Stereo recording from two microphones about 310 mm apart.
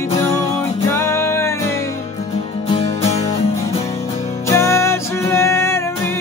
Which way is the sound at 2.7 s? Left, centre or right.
Left.